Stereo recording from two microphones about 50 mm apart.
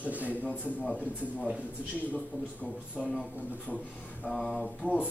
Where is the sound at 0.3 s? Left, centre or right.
Left.